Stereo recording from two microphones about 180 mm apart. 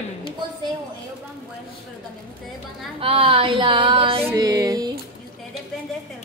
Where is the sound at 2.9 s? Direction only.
30° right (ahead or behind).